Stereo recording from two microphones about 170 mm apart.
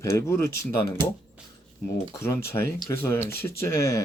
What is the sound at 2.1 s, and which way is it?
Speech, 15° left (ahead or behind).